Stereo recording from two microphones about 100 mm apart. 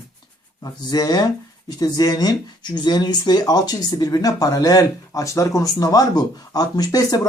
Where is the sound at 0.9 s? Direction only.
40° left (ahead or behind).